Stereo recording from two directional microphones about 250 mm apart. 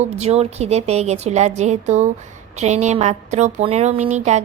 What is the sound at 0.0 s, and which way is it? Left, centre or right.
Speech, right.